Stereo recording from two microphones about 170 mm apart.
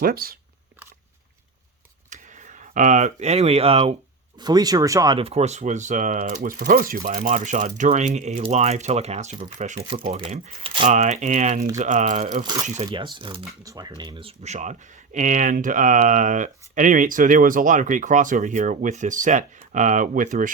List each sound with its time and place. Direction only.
0.0 s speech: 60° right (ahead or behind)
2.0 s speech: 45° right (ahead or behind)
4.4 s speech: 25° right (ahead or behind)
5.2 s speech: 40° right (ahead or behind)
10.8 s speech: 45° right (ahead or behind)
12.4 s speech: 25° right (ahead or behind)
12.6 s speech: 45° right (ahead or behind)
13.1 s speech: 30° right (ahead or behind); by 20.5 s 50° right (ahead or behind)